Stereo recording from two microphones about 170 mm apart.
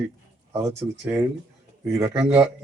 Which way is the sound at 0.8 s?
15° right (ahead or behind).